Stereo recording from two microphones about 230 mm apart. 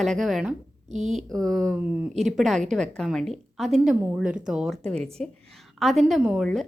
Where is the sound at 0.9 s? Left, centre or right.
Right.